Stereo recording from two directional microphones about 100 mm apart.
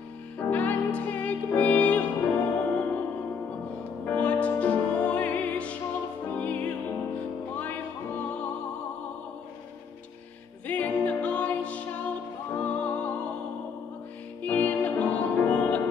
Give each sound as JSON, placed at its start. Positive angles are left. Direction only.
{"t": 0.4, "sound": "music", "side_deg": 15}
{"t": 10.7, "sound": "music", "side_deg": 15}
{"t": 14.4, "sound": "music", "side_deg": 15}